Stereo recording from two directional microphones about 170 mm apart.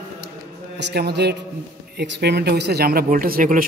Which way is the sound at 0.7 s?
75° right (ahead or behind).